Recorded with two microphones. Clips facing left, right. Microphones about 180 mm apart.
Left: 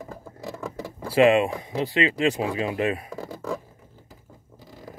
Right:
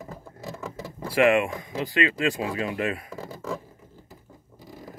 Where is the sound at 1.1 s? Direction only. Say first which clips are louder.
Left 3 dB; 25° left (ahead or behind).